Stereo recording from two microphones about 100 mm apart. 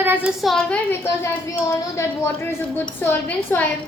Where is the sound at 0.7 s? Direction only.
20° left (ahead or behind).